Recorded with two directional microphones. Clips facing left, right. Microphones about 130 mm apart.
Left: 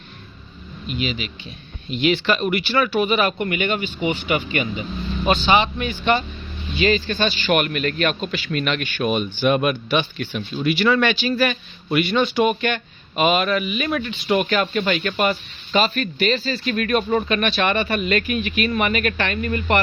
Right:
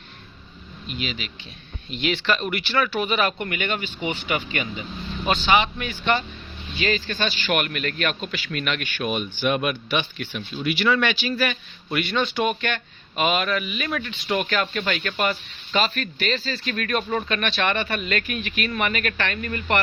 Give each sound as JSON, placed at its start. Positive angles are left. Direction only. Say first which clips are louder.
{"t": 0.9, "sound": "a man's voice", "louder": "left 5 dB", "side_deg": 10}
{"t": 11.9, "sound": "speech", "louder": "left 5 dB", "side_deg": 10}